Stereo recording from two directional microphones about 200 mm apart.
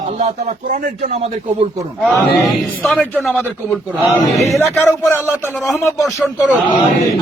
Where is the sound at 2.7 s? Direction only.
5° left (ahead or behind).